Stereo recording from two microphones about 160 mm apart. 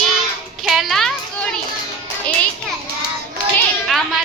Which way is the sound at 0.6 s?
5° right (ahead or behind).